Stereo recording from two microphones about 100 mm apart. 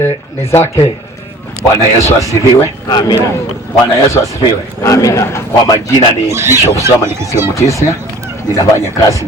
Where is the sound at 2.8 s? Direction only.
40° left (ahead or behind).